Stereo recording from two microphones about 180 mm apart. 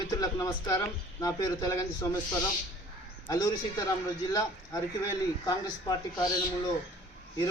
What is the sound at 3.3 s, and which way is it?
Speech, 20° left (ahead or behind).